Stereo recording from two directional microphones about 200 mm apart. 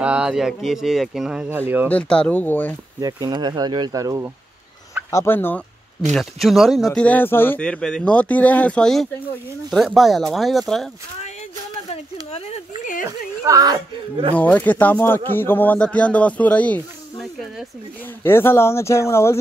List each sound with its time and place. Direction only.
0.0 s speech: 5° right (ahead or behind)
1.9 s speech: 5° left (ahead or behind)
3.0 s speech: 20° right (ahead or behind)
5.1 s speech: 10° left (ahead or behind)
6.1 s speech: centre (ahead or behind)
11.9 s a sound: 30° left (ahead or behind)
13.5 s speech: 20° right (ahead or behind)
14.3 s speech: 10° left (ahead or behind)
18.2 s speech: 10° left (ahead or behind)